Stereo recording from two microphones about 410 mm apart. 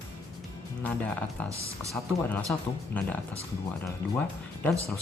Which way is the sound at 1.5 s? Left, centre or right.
Centre.